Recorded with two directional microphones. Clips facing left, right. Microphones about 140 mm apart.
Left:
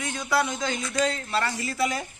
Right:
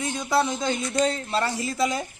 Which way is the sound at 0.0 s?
25° right (ahead or behind).